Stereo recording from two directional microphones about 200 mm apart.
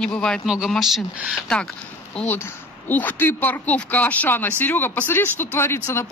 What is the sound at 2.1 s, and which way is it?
Speech, 10° left (ahead or behind).